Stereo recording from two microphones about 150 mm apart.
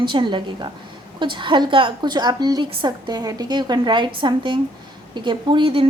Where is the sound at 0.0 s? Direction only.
30° right (ahead or behind).